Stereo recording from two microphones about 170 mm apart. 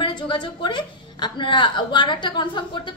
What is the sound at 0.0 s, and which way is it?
A woman's voice, 25° left (ahead or behind).